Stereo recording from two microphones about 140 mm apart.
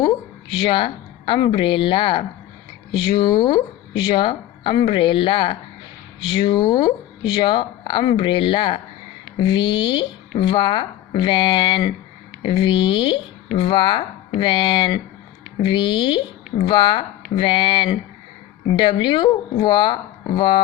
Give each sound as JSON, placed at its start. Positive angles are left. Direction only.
{"t": 0.6, "sound": "speech", "side_deg": 35}